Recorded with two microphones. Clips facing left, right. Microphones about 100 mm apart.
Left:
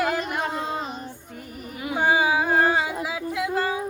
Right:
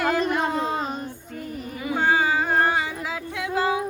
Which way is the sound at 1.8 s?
15° left (ahead or behind).